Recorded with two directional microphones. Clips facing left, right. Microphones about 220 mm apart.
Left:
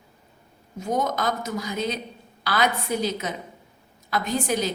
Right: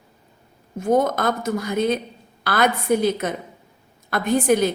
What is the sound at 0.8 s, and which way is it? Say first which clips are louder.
A woman's voice: right 6 dB; 55° right (ahead or behind).